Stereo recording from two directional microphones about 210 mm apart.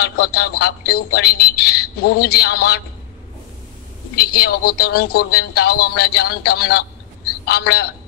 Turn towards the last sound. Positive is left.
turn(degrees=50)  # may be behind; listen again after turning